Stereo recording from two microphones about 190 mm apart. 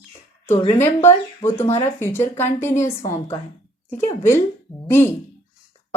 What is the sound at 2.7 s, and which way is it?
Speech, 40° left (ahead or behind).